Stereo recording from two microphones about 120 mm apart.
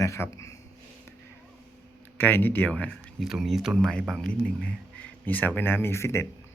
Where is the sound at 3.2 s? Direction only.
Centre (ahead or behind).